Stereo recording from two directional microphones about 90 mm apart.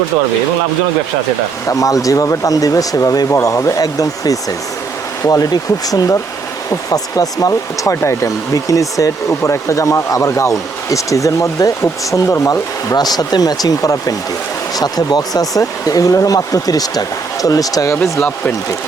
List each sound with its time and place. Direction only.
1.6 s speech: 40° left (ahead or behind)